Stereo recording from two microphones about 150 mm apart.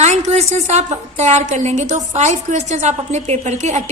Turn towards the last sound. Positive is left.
turn(degrees=-50)  # may be behind; listen again after turning